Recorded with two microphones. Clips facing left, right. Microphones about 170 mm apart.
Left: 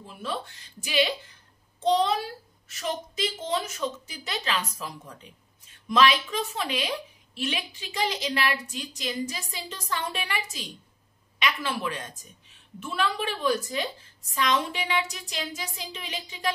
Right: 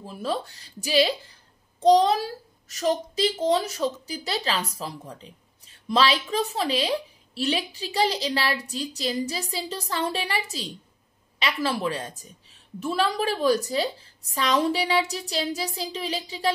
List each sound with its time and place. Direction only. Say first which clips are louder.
0.0 s a woman's voice: right 5 dB; 35° right (ahead or behind)